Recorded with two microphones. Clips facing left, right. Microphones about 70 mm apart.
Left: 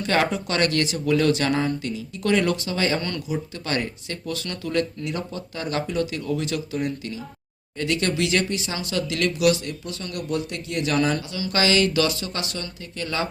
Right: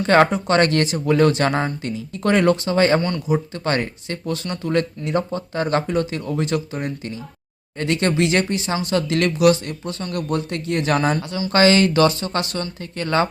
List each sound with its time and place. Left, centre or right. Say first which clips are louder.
0.0 s speech: right 7 dB; right